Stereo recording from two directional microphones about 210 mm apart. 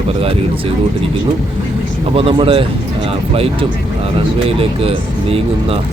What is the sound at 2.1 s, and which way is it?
Speech, 25° right (ahead or behind).